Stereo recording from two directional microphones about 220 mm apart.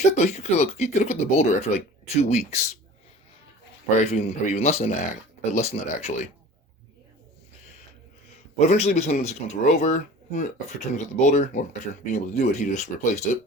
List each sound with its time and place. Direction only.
0.0 s speech: 30° left (ahead or behind)
3.8 s speech: 30° left (ahead or behind)
8.5 s speech: 30° left (ahead or behind)